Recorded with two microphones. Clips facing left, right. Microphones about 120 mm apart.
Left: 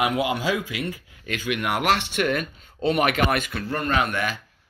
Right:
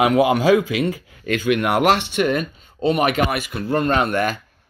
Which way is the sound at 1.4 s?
30° right (ahead or behind).